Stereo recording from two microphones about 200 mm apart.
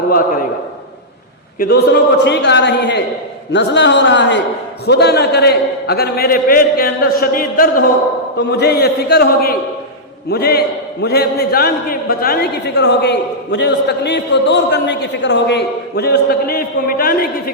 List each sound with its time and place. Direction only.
1.5 s a man's voice: 50° left (ahead or behind)